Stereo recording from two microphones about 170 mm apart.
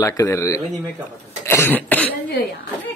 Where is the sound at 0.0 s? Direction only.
15° left (ahead or behind).